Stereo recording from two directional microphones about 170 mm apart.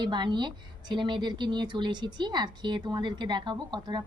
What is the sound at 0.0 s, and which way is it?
A woman's voice, 25° right (ahead or behind).